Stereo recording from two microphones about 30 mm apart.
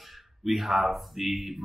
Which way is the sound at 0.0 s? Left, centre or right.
Centre.